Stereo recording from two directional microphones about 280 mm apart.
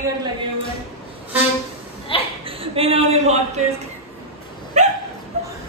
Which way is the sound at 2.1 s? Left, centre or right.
Centre.